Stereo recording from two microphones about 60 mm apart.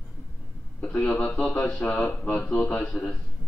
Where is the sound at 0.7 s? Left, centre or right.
Left.